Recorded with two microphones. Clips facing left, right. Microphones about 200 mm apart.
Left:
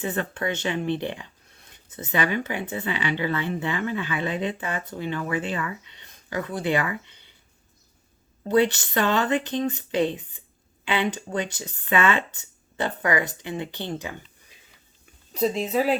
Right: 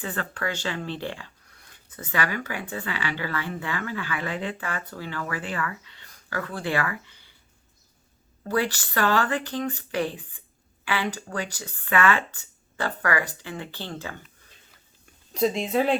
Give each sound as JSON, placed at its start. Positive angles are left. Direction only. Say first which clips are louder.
{"t": 0.0, "sound": "speech", "louder": "left 3 dB", "side_deg": 20}
{"t": 8.4, "sound": "speech", "louder": "left 6 dB", "side_deg": 20}
{"t": 15.3, "sound": "speech", "louder": "even", "side_deg": 0}